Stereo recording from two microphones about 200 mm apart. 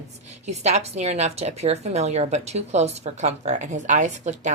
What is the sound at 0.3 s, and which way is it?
A woman's voice, 35° right (ahead or behind).